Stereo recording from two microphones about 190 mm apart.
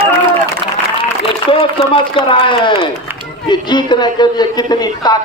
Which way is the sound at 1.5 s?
25° left (ahead or behind).